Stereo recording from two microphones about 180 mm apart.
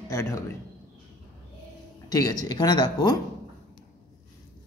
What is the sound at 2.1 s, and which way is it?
Speech, 20° left (ahead or behind).